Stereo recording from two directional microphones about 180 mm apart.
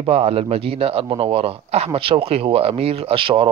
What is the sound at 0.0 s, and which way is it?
A man's voice, 35° right (ahead or behind).